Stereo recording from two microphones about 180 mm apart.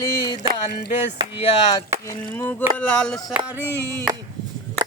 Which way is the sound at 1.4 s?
30° left (ahead or behind).